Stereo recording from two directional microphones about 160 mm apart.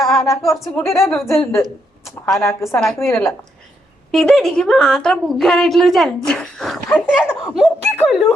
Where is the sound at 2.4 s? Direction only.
15° left (ahead or behind).